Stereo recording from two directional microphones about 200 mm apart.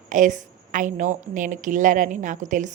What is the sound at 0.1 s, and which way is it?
A woman's voice, 40° right (ahead or behind).